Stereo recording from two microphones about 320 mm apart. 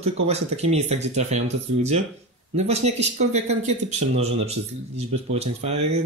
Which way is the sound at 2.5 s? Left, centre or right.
Centre.